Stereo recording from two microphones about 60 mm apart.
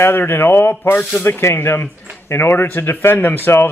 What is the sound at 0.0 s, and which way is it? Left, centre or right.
A man's voice, left.